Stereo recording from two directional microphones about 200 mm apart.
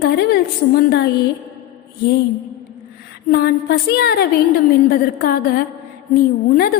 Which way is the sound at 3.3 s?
50° left (ahead or behind).